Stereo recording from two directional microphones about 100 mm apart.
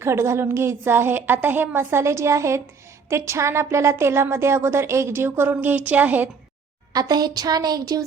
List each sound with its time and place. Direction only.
0.0 s a woman's voice: 25° right (ahead or behind)
6.9 s a woman's voice: 40° right (ahead or behind)